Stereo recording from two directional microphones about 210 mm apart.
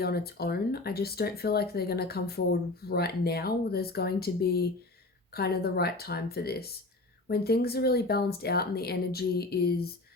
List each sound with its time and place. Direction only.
0.0 s speech: 50° left (ahead or behind)